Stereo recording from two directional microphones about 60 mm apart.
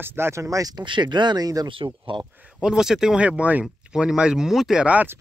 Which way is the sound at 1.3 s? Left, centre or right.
Right.